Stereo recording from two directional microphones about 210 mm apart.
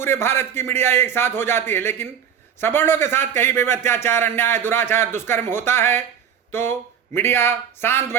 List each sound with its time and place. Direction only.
0.0 s a man's voice: 10° left (ahead or behind)